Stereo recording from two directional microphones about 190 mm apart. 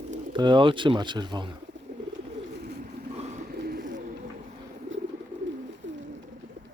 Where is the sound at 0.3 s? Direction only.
25° right (ahead or behind).